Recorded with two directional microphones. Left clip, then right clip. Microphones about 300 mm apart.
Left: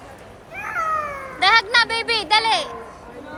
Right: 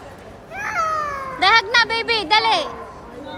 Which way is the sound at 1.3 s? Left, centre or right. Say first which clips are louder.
Right 1 dB; centre.